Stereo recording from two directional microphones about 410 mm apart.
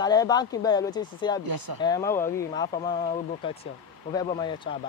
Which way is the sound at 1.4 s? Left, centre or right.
Right.